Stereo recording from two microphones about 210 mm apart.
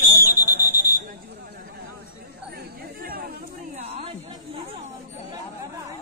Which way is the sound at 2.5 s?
45° right (ahead or behind).